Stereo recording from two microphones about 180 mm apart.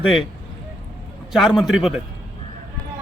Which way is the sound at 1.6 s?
Centre (ahead or behind).